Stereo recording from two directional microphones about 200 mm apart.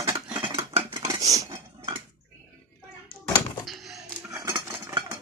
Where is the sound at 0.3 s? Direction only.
25° right (ahead or behind).